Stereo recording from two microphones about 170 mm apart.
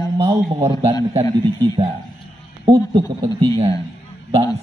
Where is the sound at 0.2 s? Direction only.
30° right (ahead or behind).